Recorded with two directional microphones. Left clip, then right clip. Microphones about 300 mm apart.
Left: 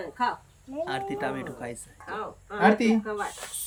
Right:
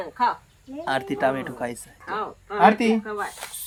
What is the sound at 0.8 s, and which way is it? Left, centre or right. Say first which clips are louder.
A woman's voice: right 8 dB; centre.